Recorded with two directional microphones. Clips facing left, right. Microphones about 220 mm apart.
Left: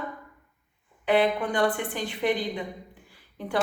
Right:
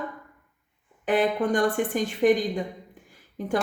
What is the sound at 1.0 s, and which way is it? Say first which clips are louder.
A woman's voice: right 1 dB; 45° right (ahead or behind).